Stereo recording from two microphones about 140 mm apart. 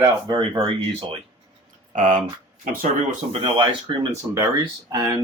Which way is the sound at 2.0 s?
65° right (ahead or behind).